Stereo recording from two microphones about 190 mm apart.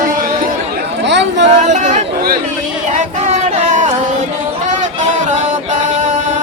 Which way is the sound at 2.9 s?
40° right (ahead or behind).